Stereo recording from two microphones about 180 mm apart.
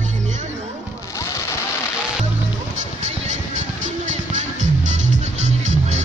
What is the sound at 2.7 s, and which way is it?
Music, 40° right (ahead or behind).